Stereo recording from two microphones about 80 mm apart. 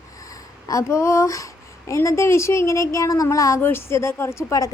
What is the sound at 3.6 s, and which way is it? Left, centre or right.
A woman's voice, left.